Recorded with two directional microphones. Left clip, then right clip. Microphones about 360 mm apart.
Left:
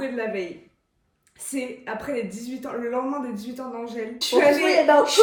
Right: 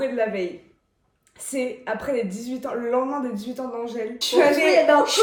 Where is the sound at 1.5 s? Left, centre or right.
Centre.